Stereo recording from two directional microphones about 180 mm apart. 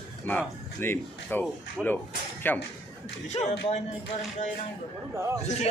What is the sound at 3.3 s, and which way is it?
Speech, 40° left (ahead or behind).